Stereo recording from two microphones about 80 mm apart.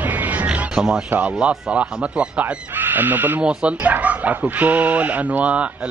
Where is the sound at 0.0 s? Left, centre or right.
Right.